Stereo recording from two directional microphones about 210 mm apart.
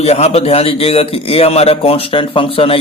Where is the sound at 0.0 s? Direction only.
30° left (ahead or behind).